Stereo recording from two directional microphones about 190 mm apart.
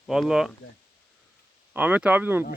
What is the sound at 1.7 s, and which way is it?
Speech, 5° right (ahead or behind).